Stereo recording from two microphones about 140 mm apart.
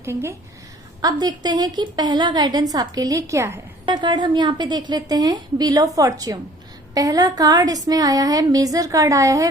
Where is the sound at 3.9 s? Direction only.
35° right (ahead or behind).